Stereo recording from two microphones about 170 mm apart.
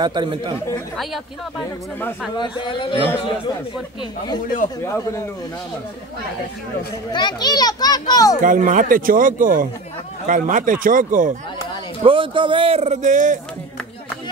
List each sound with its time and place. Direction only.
0.0 s speech: 25° right (ahead or behind)
2.3 s a child's voice: 25° left (ahead or behind)
4.8 s speech: 15° left (ahead or behind)
7.1 s a child's voice: 25° left (ahead or behind)
8.4 s speech: 50° right (ahead or behind)
12.0 s speech: 30° right (ahead or behind); by 13.4 s 50° right (ahead or behind)